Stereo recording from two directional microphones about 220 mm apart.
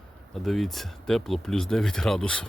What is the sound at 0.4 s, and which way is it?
Speech, centre (ahead or behind).